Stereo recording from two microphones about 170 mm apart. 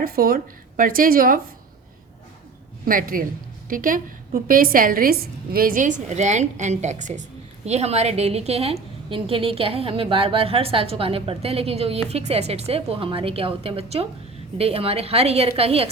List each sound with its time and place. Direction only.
0.0 s speech: 60° right (ahead or behind)
2.8 s a woman's voice: 55° right (ahead or behind); by 15.9 s 35° right (ahead or behind)